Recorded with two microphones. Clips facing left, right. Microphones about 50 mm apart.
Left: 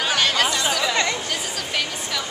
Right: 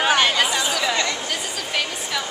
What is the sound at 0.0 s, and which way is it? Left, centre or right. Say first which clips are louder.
Chatter: right 2 dB; centre.